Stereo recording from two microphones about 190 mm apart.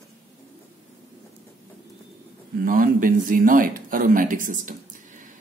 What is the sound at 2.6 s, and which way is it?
A man's voice, 45° right (ahead or behind).